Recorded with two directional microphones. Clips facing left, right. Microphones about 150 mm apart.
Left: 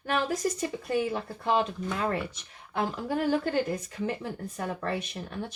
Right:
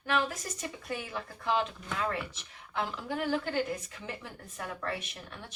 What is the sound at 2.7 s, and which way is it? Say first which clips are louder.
Speech: left 5 dB; 40° left (ahead or behind).